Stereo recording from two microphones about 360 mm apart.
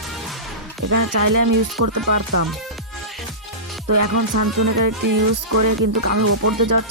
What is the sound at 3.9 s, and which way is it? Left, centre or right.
Speech, right.